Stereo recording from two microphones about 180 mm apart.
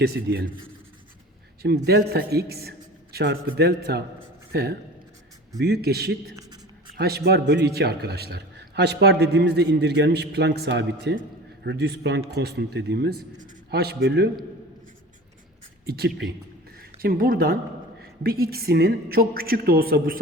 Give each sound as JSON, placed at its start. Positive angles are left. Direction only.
{"t": 0.0, "sound": "a man's voice", "side_deg": -65}
{"t": 1.9, "sound": "a man's voice", "side_deg": -65}
{"t": 15.9, "sound": "a man's voice", "side_deg": -70}
{"t": 17.0, "sound": "a man's voice", "side_deg": -55}